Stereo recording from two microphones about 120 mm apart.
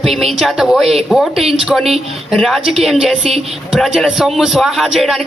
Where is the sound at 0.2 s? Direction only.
Centre (ahead or behind).